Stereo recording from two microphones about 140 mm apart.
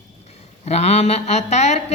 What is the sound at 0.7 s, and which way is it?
A man's voice, 50° left (ahead or behind).